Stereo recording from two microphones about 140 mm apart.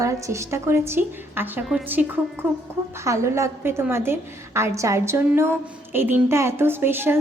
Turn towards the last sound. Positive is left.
turn(degrees=-15)  # may be behind; listen again after turning